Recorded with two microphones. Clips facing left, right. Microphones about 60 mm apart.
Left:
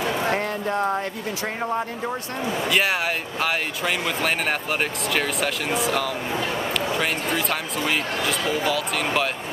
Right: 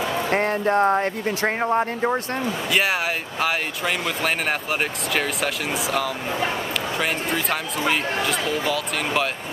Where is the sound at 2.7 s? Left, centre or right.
Centre.